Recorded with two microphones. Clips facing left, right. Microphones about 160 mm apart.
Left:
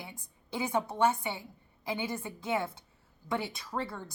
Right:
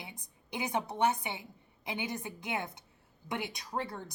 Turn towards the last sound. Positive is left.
turn(degrees=-15)  # may be behind; listen again after turning